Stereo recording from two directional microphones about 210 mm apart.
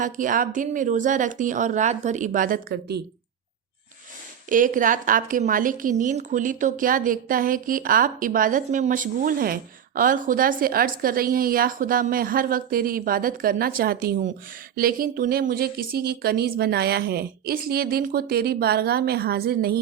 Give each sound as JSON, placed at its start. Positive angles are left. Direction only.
{"t": 0.0, "sound": "speech", "side_deg": -40}
{"t": 4.4, "sound": "speech", "side_deg": -40}